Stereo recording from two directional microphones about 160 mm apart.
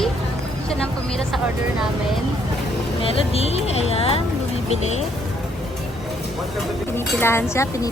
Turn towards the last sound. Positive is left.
turn(degrees=20)  # may be behind; listen again after turning